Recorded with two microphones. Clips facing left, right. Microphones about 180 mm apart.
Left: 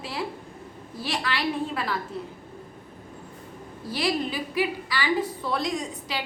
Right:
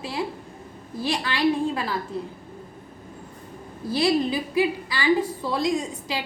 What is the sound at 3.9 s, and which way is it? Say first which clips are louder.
A woman's voice: right 5 dB; 25° right (ahead or behind).